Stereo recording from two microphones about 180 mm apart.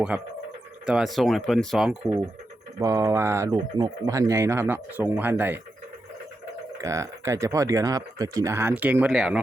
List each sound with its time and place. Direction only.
0.9 s speech: centre (ahead or behind)
2.7 s speech: 15° right (ahead or behind)
6.8 s speech: 15° right (ahead or behind)